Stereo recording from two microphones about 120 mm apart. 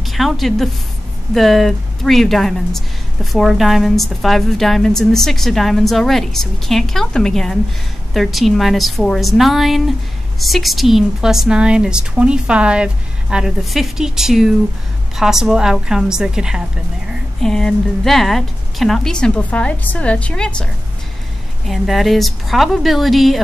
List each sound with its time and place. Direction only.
0.0 s a woman's voice: centre (ahead or behind)